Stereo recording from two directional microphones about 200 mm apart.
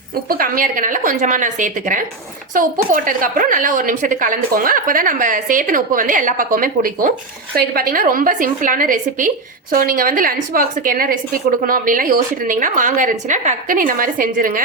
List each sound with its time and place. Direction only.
0.3 s a woman's voice: 45° right (ahead or behind)